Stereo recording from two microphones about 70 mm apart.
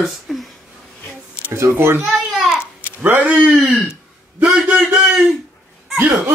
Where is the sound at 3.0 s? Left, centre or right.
Right.